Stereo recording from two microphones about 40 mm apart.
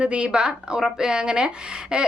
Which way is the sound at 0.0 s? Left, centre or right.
Right.